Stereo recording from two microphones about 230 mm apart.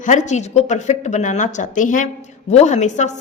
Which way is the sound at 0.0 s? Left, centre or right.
Left.